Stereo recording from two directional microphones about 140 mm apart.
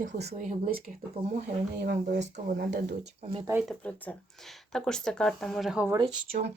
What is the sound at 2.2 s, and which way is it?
Speech, 75° right (ahead or behind).